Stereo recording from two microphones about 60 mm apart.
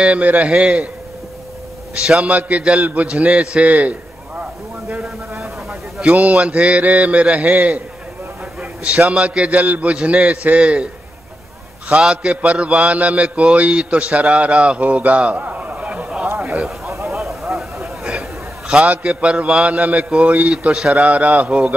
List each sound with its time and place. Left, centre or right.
0.0 s mantra: right
2.0 s mantra: right
4.4 s a sound: right
5.4 s a sound: centre
6.0 s mantra: right
9.1 s mantra: centre
11.9 s mantra: centre
17.1 s a sound: centre
18.7 s mantra: centre